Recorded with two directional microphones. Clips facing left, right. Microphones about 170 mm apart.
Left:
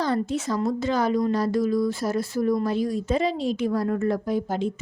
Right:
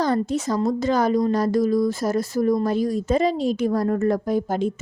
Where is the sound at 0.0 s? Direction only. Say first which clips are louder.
Right 3 dB; 45° right (ahead or behind).